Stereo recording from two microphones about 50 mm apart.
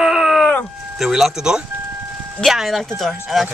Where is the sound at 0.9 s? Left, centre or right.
Centre.